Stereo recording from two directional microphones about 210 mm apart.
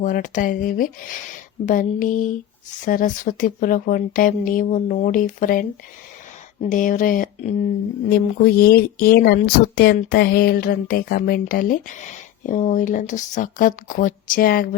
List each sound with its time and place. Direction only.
0.0 s speech: 40° left (ahead or behind)